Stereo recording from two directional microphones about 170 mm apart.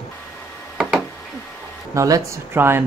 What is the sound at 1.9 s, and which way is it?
Speech, 20° right (ahead or behind).